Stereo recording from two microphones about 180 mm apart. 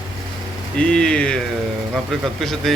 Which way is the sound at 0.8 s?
5° left (ahead or behind).